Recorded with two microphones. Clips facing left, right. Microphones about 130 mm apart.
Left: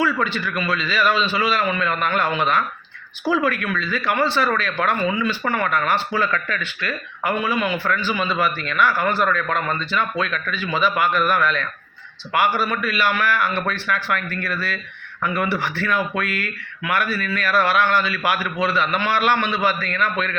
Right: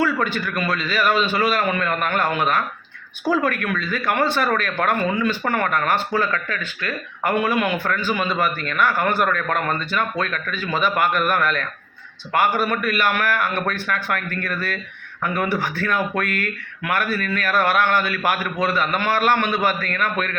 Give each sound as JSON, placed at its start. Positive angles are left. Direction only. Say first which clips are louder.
{"t": 0.0, "sound": "speech", "louder": "even", "side_deg": -50}